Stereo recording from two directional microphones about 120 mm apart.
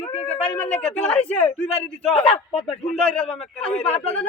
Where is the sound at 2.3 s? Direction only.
55° left (ahead or behind).